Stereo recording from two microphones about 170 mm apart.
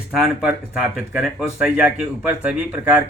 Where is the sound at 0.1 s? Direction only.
Centre (ahead or behind).